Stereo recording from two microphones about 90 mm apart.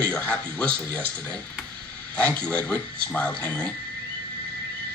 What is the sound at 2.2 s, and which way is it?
Speech, 15° left (ahead or behind).